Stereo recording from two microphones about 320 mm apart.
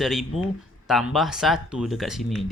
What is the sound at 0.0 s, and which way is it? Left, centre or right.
Speech, centre.